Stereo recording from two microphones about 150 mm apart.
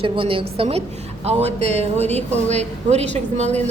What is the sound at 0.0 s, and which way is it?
A woman's voice, 35° right (ahead or behind).